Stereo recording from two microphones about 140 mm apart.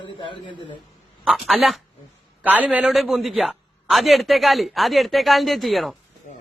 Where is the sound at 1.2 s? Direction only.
5° right (ahead or behind).